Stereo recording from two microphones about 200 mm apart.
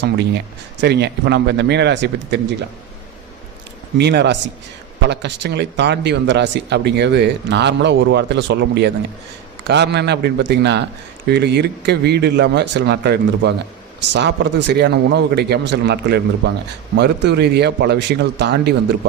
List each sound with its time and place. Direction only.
0.0 s speech: 55° right (ahead or behind)
3.9 s speech: 55° right (ahead or behind)